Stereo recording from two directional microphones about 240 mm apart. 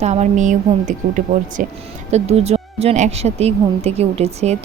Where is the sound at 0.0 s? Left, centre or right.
Right.